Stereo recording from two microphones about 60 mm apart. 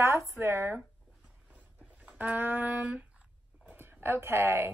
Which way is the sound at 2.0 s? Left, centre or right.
Right.